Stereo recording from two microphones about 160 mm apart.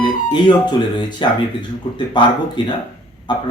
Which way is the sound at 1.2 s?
30° left (ahead or behind).